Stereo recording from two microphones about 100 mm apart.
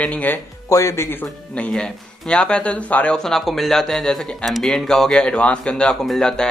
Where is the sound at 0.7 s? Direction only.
35° left (ahead or behind).